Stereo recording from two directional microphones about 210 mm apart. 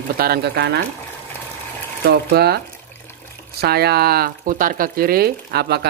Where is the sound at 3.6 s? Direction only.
50° right (ahead or behind).